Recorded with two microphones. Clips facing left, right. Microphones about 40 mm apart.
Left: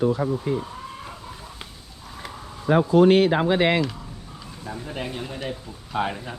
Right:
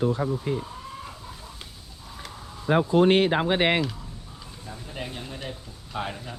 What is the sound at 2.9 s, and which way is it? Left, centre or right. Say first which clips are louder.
Speech: left 4 dB; right.